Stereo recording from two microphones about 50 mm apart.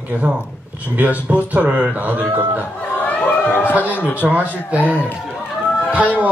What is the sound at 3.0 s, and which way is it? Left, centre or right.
Chatter, left.